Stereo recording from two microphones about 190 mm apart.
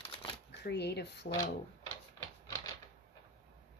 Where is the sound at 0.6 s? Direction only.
60° left (ahead or behind).